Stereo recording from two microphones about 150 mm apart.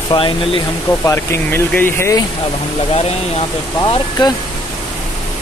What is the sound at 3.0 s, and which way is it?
Speech, 45° left (ahead or behind).